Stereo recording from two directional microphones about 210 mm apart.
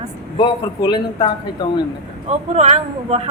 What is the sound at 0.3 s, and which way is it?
Speech, 25° left (ahead or behind).